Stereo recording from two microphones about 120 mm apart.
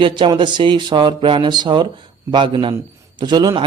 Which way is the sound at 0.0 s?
40° right (ahead or behind).